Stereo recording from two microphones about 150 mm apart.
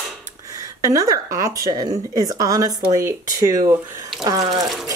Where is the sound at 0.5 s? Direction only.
20° right (ahead or behind).